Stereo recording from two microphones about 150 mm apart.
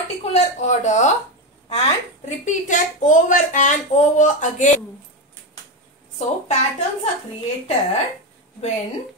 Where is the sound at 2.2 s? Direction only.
55° left (ahead or behind).